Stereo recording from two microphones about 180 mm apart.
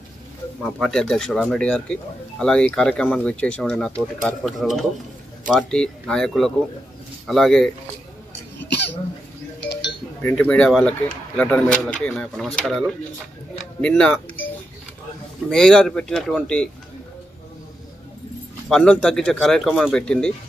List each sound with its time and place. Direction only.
0.7 s speech: centre (ahead or behind)
8.6 s hiccup: 70° left (ahead or behind)
9.7 s music: 70° left (ahead or behind)
10.3 s speech: 5° left (ahead or behind)
15.5 s speech: 5° left (ahead or behind)
18.7 s speech: 5° left (ahead or behind)